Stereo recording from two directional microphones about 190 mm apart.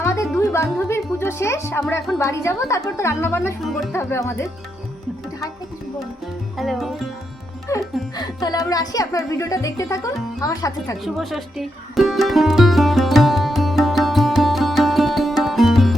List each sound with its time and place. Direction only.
0.0 s music: 15° left (ahead or behind)
2.1 s speech: 15° left (ahead or behind)
3.6 s speech: centre (ahead or behind)
3.9 s speech: 15° left (ahead or behind)
6.6 s speech: centre (ahead or behind)
7.7 s music: 15° left (ahead or behind)
8.1 s speech: 20° left (ahead or behind)
11.0 s music: centre (ahead or behind)